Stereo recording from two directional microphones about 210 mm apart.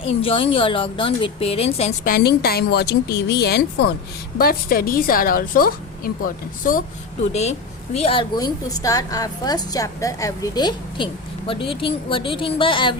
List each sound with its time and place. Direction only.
0.2 s a woman's voice: 25° left (ahead or behind)
2.0 s a woman's voice: 45° left (ahead or behind)
7.9 s a woman's voice: 25° left (ahead or behind)